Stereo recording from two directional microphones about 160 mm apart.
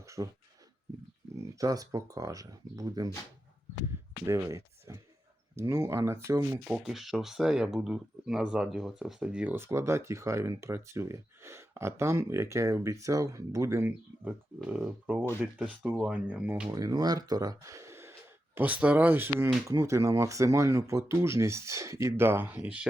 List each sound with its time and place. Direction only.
0.2 s speech: 20° right (ahead or behind)
1.4 s speech: 20° right (ahead or behind)
4.3 s speech: 20° right (ahead or behind)
6.7 s speech: 5° right (ahead or behind)
16.6 s speech: 20° right (ahead or behind)